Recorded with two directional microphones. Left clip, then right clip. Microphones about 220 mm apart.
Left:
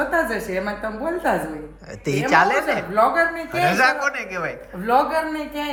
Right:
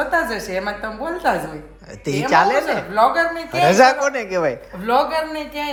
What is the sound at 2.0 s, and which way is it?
A woman's voice, 15° right (ahead or behind).